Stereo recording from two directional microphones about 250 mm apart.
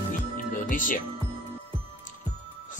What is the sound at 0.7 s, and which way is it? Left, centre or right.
Speech, left.